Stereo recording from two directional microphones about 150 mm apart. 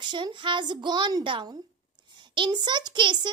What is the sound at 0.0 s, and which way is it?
A woman's voice, 30° right (ahead or behind).